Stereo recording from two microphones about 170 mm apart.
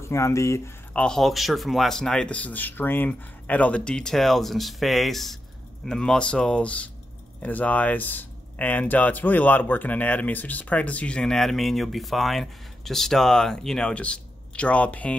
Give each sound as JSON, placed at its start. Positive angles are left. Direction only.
{"t": 0.0, "sound": "speech", "side_deg": 15}
{"t": 1.0, "sound": "speech", "side_deg": 0}